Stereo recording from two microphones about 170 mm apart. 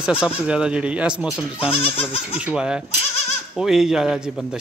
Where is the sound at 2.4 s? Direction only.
5° right (ahead or behind).